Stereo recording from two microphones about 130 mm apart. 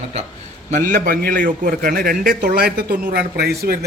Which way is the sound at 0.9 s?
90° right.